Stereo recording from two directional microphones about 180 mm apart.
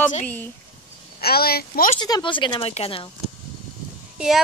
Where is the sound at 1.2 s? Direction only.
60° left (ahead or behind).